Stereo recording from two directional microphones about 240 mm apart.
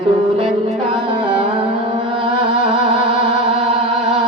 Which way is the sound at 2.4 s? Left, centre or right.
Right.